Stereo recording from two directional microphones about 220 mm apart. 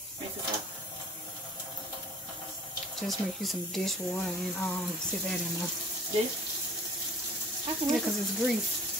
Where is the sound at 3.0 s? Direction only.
Centre (ahead or behind).